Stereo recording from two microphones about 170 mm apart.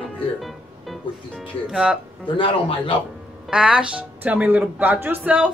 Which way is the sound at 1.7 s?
5° right (ahead or behind).